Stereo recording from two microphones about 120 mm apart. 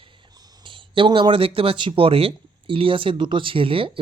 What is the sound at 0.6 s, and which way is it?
A man's voice, 45° right (ahead or behind).